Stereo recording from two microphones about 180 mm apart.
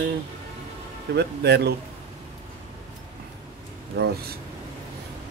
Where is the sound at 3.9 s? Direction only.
65° right (ahead or behind).